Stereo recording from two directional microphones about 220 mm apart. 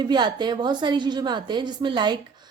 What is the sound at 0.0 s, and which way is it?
A woman's voice, 20° right (ahead or behind).